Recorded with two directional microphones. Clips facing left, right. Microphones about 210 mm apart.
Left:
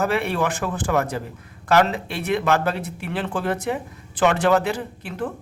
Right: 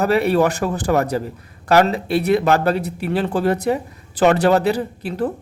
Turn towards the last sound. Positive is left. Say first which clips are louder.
# right 6 dB
turn(degrees=-35)  # may be behind; listen again after turning